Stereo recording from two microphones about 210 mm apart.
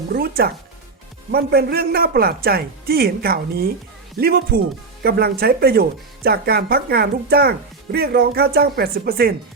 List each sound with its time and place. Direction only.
0.1 s speech: 45° right (ahead or behind)